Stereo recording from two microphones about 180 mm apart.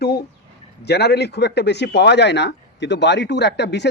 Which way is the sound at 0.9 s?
65° left (ahead or behind).